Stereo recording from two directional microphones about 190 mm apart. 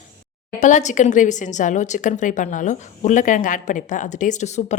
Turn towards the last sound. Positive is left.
turn(degrees=35)  # may be behind; listen again after turning